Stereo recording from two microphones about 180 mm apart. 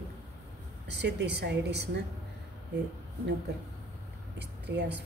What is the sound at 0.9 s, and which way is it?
Speech, 70° right (ahead or behind).